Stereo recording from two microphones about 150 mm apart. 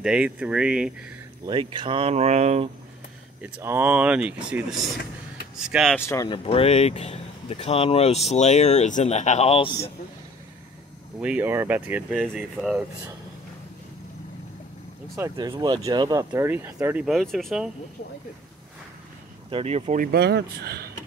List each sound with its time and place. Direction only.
0.0 s speech: 5° right (ahead or behind)
1.4 s speech: 30° right (ahead or behind)
3.4 s speech: 10° right (ahead or behind)
5.9 s speech: 20° left (ahead or behind)
6.2 s speech: 35° left (ahead or behind)
11.1 s speech: 10° right (ahead or behind)
15.3 s speech: 30° right (ahead or behind); by 17.1 s 10° right (ahead or behind)
17.1 s speech: centre (ahead or behind)
19.5 s speech: 45° right (ahead or behind)
20.0 s speech: 90° right